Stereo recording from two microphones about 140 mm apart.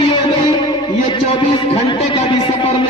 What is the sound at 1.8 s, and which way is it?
Speech, 40° left (ahead or behind).